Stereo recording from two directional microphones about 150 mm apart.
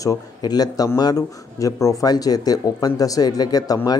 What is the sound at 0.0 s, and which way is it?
Speech, 25° left (ahead or behind).